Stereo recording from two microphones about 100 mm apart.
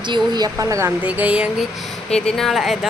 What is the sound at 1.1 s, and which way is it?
Speech, 15° right (ahead or behind).